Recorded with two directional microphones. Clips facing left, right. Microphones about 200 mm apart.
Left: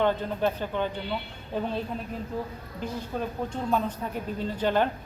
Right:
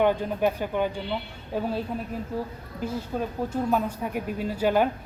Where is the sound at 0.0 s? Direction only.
10° right (ahead or behind).